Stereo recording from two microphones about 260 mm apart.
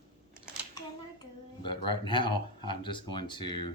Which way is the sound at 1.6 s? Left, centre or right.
Centre.